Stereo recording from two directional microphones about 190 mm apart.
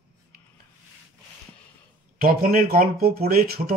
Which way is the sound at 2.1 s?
50° right (ahead or behind).